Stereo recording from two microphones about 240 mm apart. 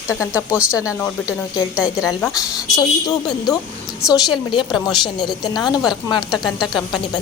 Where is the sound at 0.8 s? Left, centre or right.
Centre.